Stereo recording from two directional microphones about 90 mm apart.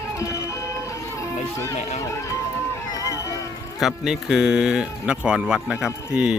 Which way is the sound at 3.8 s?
Centre (ahead or behind).